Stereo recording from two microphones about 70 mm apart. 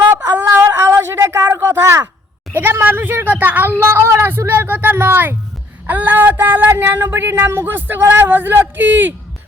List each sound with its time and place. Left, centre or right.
0.4 s a sound: right
2.5 s speech: right
3.8 s speech: right
5.8 s speech: right